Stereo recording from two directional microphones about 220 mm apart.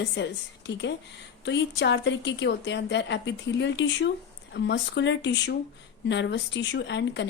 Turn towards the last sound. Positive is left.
turn(degrees=55)  # may be behind; listen again after turning